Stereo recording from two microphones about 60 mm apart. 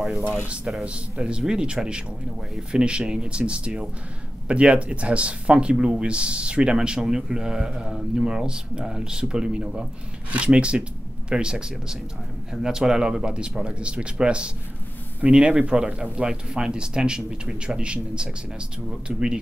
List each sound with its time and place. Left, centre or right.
0.8 s speech: centre